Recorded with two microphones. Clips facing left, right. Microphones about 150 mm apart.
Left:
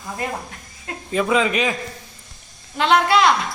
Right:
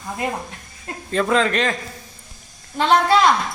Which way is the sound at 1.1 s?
5° left (ahead or behind).